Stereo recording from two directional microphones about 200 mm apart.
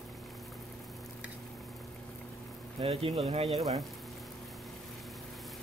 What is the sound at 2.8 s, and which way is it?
Speech, 30° right (ahead or behind).